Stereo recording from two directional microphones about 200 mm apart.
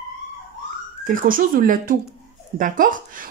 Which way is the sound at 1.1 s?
45° right (ahead or behind).